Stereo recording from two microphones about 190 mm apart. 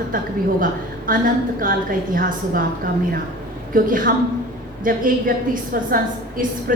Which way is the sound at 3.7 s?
45° right (ahead or behind).